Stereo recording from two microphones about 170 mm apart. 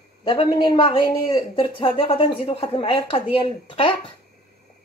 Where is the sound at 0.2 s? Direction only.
30° left (ahead or behind).